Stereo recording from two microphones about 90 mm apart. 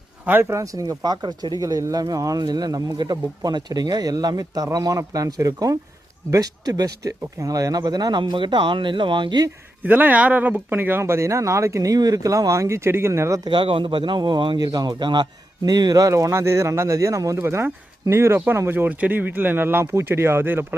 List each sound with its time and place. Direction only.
0.3 s speech: 25° right (ahead or behind); by 8.2 s 45° right (ahead or behind)
8.3 s speech: 60° right (ahead or behind)
9.8 s speech: 20° right (ahead or behind)
13.4 s speech: 65° right (ahead or behind)
14.6 s speech: 45° right (ahead or behind); by 20.7 s 25° right (ahead or behind)